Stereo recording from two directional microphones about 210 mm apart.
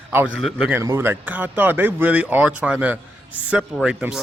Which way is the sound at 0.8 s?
10° right (ahead or behind).